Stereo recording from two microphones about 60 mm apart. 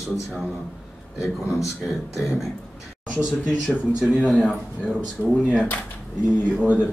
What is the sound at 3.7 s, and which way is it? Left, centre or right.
Speech, centre.